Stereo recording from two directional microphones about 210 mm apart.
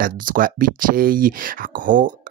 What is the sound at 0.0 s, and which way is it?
Speech, 40° right (ahead or behind).